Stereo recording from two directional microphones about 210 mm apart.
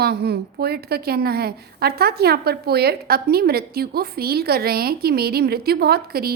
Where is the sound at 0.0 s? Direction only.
50° right (ahead or behind).